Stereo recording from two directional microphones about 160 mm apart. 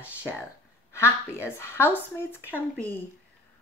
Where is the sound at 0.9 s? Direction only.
15° left (ahead or behind).